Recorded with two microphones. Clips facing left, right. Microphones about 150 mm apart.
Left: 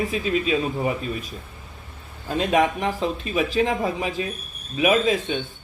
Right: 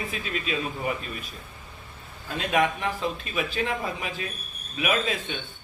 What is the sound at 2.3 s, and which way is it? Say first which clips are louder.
A man's voice: left 4 dB; 40° left (ahead or behind).